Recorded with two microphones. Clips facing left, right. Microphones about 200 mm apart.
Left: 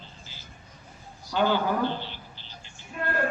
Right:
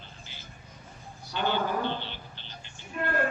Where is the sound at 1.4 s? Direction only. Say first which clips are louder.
Left 4 dB; 60° right (ahead or behind).